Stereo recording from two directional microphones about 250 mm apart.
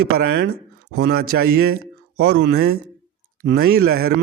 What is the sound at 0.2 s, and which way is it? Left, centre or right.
Speech, right.